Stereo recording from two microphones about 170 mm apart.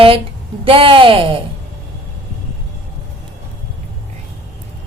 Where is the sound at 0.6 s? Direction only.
30° right (ahead or behind).